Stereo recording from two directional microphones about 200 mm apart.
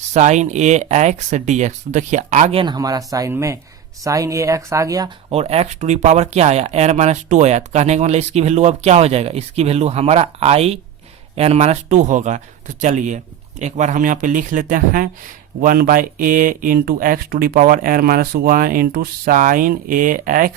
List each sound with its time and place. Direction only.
0.1 s speech: 35° right (ahead or behind); by 5.1 s 20° right (ahead or behind)
5.3 s speech: 30° right (ahead or behind)